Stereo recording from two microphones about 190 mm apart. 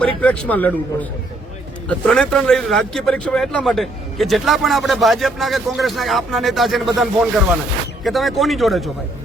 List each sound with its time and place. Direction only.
0.0 s a man's voice: 5° left (ahead or behind)